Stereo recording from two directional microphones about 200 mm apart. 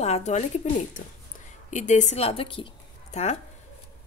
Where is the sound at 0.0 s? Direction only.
35° left (ahead or behind).